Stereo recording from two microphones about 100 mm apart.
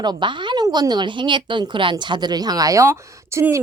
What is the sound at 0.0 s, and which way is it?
Speech, 50° right (ahead or behind).